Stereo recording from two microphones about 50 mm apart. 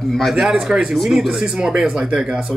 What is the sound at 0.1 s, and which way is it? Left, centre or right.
Speech, centre.